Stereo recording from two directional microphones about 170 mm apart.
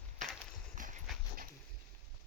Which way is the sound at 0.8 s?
50° right (ahead or behind).